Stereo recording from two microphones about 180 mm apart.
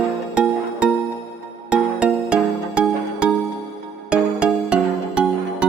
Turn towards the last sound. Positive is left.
turn(degrees=-5)  # may be behind; listen again after turning